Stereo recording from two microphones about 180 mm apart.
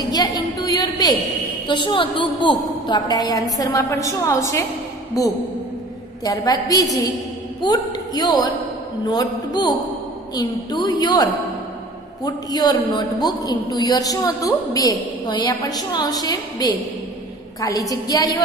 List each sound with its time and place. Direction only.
0.1 s a sound: 20° left (ahead or behind)
1.7 s a man's voice: 25° left (ahead or behind)
12.3 s a man's voice: 25° left (ahead or behind)